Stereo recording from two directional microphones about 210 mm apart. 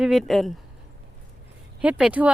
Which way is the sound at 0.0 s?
Centre (ahead or behind).